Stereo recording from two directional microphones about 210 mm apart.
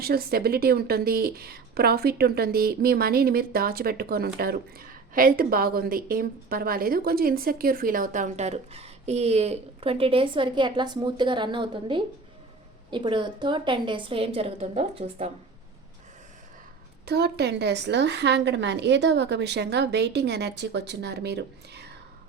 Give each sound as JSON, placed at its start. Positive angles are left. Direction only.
{"t": 0.0, "sound": "a woman's voice", "side_deg": -45}
{"t": 17.1, "sound": "a woman's voice", "side_deg": -50}